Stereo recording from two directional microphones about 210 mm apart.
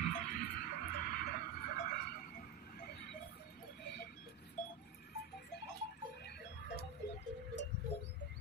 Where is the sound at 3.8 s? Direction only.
50° left (ahead or behind).